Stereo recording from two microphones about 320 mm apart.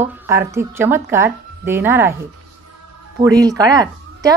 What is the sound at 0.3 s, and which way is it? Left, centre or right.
Speech, centre.